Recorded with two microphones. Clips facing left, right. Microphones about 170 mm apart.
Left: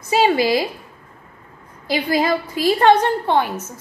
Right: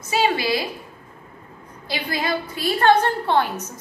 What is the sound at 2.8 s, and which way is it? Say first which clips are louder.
Speech: left 1 dB; 20° left (ahead or behind).